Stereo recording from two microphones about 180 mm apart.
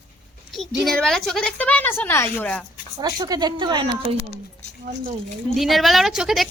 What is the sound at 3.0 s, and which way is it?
A woman's voice, 20° right (ahead or behind).